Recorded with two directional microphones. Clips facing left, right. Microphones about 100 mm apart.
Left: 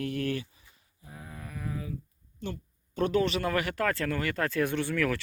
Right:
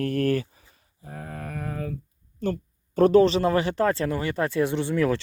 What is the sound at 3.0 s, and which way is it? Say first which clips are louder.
Speech: right 10 dB; 40° right (ahead or behind).